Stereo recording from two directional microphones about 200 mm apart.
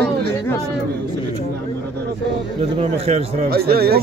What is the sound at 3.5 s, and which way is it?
Speech, 50° right (ahead or behind).